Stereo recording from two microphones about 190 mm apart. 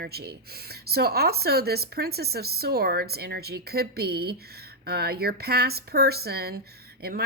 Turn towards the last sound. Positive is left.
turn(degrees=-55)  # may be behind; listen again after turning